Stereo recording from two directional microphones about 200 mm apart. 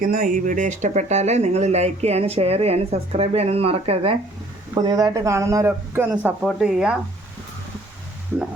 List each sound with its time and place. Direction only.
0.0 s speech: 40° right (ahead or behind); by 6.9 s 5° right (ahead or behind)